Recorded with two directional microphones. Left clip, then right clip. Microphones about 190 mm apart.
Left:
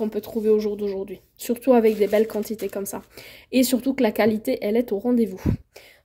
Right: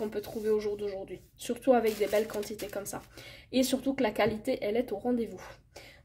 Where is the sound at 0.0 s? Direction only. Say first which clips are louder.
Left 9 dB; 35° left (ahead or behind).